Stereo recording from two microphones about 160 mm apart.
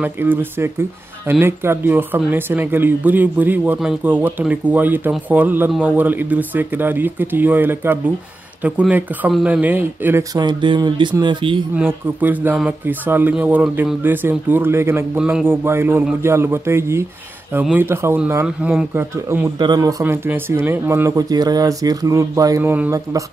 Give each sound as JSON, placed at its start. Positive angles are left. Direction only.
{"t": 0.0, "sound": "speech", "side_deg": -10}
{"t": 10.3, "sound": "speech", "side_deg": -30}
{"t": 11.7, "sound": "speech", "side_deg": -10}